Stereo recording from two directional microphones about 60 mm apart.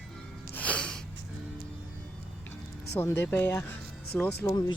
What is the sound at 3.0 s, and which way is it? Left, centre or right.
Speech, left.